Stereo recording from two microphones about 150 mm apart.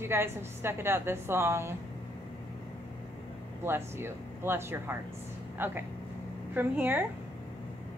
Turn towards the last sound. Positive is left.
turn(degrees=-10)  # may be behind; listen again after turning